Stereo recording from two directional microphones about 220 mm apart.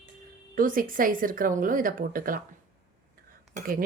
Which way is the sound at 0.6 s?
40° right (ahead or behind).